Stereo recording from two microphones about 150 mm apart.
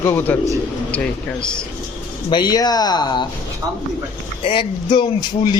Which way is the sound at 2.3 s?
30° left (ahead or behind).